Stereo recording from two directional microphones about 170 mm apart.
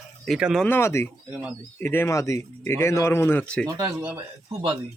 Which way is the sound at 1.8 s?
15° left (ahead or behind).